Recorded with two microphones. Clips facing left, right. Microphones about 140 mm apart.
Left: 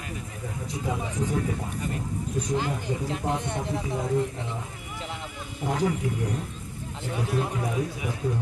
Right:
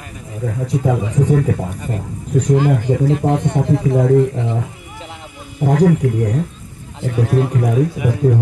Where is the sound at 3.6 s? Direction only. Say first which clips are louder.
Right 13 dB; 80° right.